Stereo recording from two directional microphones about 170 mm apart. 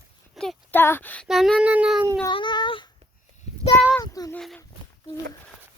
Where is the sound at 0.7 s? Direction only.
10° left (ahead or behind).